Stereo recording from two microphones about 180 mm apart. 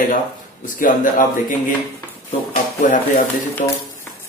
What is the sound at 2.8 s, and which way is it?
Speech, 45° left (ahead or behind).